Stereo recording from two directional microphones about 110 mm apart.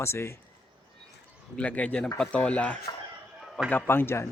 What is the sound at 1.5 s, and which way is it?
Speech, 10° left (ahead or behind).